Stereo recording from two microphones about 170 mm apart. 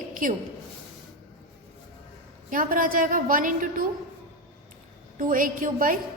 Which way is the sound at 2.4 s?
55° right (ahead or behind).